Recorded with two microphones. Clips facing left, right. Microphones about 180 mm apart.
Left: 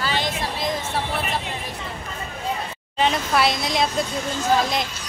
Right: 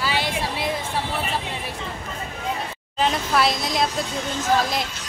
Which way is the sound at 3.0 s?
Centre (ahead or behind).